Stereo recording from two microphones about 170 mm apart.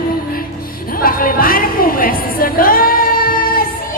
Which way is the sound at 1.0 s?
60° left (ahead or behind).